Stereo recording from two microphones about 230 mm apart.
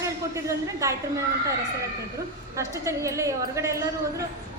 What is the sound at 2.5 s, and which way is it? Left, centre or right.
A woman's voice, centre.